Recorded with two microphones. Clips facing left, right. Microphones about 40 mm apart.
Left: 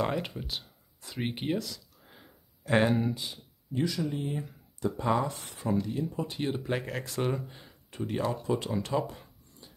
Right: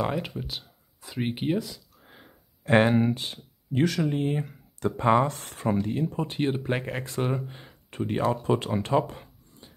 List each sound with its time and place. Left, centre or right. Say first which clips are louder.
0.0 s speech: right 2 dB; centre
1.7 s a sound: right 1 dB; right
2.6 s speech: right 5 dB; right
4.1 s speech: right 7 dB; right
5.3 s speech: right 3 dB; right
7.3 s speech: right 4 dB; right
9.0 s a sound: right 1 dB; right